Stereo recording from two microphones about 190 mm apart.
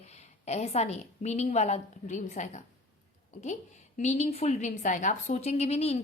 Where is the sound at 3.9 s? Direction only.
35° left (ahead or behind).